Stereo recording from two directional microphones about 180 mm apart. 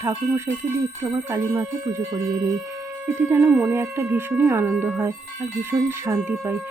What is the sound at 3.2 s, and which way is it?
Speech, 10° right (ahead or behind).